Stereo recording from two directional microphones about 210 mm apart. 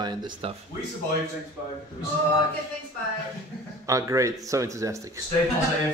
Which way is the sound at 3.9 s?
15° right (ahead or behind).